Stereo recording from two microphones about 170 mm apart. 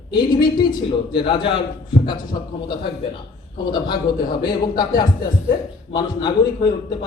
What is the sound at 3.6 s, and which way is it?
A man's voice, 25° left (ahead or behind).